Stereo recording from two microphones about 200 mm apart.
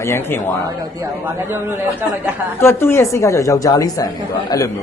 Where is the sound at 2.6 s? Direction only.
10° left (ahead or behind).